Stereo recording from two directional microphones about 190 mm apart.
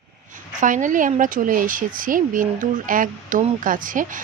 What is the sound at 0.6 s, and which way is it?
Speech, 40° right (ahead or behind).